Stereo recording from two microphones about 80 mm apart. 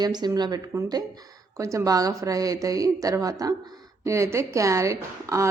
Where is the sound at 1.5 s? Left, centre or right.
Right.